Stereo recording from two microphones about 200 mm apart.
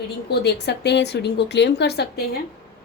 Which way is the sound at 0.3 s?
55° left (ahead or behind).